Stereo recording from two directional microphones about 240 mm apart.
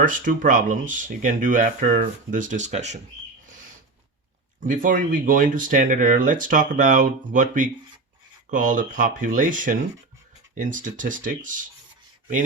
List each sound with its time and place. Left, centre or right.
0.0 s speech: right
3.4 s a sound: right
4.6 s speech: right